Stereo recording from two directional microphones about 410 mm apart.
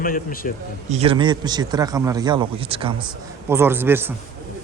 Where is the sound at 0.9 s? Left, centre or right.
Centre.